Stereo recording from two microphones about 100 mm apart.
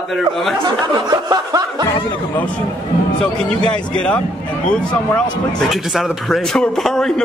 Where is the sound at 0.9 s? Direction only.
40° right (ahead or behind).